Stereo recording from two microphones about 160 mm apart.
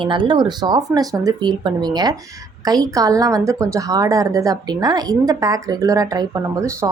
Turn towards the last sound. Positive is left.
turn(degrees=-20)  # may be behind; listen again after turning